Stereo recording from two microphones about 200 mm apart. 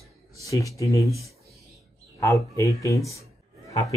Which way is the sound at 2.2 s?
15° left (ahead or behind).